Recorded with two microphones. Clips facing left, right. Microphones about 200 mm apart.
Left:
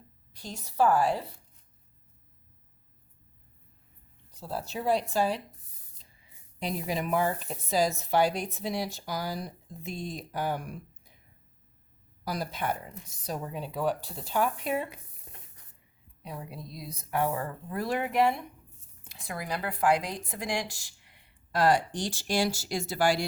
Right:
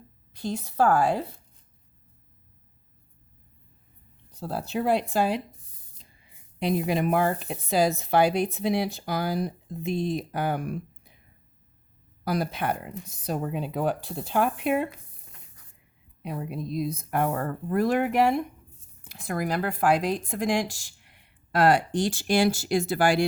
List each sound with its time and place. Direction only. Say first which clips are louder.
0.3 s speech: right 3 dB; 60° right (ahead or behind)
4.4 s speech: right 6 dB; 60° right (ahead or behind)
6.6 s speech: right 7 dB; 65° right (ahead or behind)
12.2 s speech: right 5 dB; 60° right (ahead or behind)
16.2 s speech: right 8 dB; 55° right (ahead or behind)
21.5 s speech: right 4 dB; 60° right (ahead or behind)